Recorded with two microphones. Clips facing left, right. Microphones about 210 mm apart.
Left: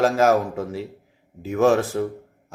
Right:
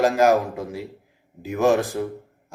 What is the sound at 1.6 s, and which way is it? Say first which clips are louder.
Speech: left 1 dB; 15° right (ahead or behind).